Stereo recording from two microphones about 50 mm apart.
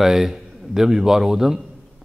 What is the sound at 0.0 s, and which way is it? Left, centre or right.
Speech, centre.